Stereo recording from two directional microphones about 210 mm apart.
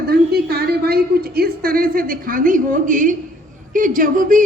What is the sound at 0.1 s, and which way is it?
A woman's voice, 50° right (ahead or behind).